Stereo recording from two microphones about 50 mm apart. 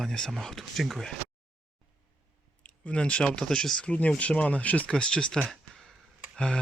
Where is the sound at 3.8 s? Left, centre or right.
Left.